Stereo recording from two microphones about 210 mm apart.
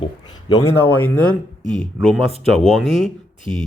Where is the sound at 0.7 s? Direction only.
5° left (ahead or behind).